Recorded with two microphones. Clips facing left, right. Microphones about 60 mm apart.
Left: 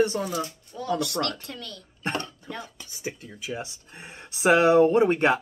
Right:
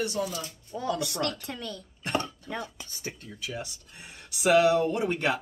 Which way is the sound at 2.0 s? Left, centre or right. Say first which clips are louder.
Even; left.